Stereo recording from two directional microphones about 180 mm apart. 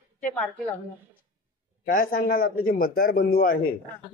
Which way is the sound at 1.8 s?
50° left (ahead or behind).